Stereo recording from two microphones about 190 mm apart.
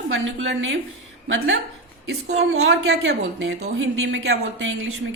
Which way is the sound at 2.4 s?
75° right (ahead or behind).